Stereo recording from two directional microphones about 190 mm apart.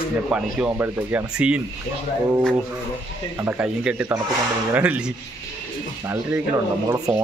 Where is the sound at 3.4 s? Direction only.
10° right (ahead or behind).